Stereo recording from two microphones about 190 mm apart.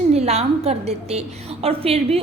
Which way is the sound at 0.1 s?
35° right (ahead or behind).